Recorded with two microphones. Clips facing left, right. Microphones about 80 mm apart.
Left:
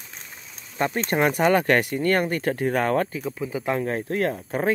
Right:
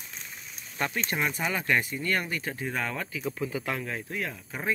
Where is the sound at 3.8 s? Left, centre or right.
Left.